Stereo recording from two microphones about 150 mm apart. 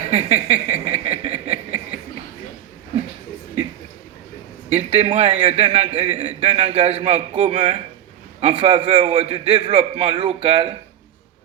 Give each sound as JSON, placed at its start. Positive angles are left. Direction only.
{"t": 0.1, "sound": "a man's voice", "side_deg": -45}
{"t": 4.7, "sound": "a man's voice", "side_deg": -40}